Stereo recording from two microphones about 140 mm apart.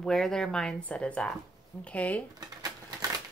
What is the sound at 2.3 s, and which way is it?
Typewriter, 25° right (ahead or behind).